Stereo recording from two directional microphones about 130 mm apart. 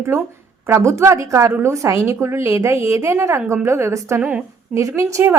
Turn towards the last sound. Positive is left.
turn(degrees=-20)  # may be behind; listen again after turning